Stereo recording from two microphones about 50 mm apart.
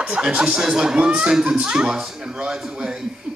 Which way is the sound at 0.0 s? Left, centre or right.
Right.